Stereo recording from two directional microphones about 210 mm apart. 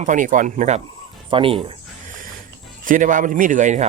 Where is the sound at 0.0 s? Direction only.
35° right (ahead or behind).